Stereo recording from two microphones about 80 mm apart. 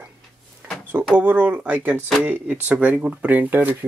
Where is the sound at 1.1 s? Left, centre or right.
Centre.